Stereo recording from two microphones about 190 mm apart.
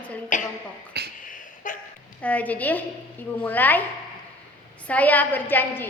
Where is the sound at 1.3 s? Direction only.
45° left (ahead or behind).